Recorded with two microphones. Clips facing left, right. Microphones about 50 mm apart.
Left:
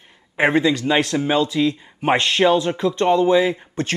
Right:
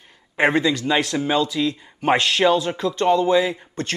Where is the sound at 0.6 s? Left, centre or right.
Centre.